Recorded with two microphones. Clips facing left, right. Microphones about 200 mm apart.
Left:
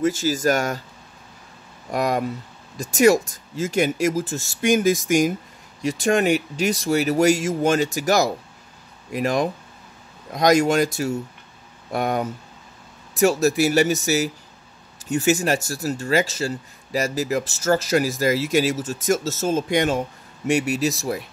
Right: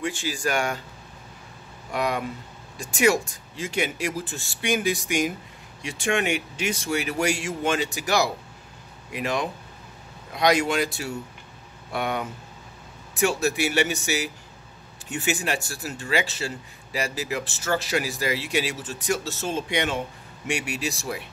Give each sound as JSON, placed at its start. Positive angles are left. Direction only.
{"t": 0.0, "sound": "speech", "side_deg": 40}
{"t": 1.9, "sound": "speech", "side_deg": 40}